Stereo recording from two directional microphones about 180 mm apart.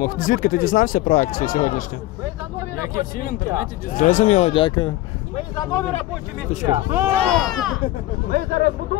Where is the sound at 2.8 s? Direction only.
50° left (ahead or behind); by 5.8 s 20° left (ahead or behind).